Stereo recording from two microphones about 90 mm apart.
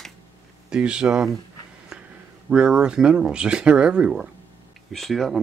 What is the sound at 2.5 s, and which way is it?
Speech, 10° right (ahead or behind).